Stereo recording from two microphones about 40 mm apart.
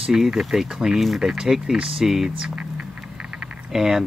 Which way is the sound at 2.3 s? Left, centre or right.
Right.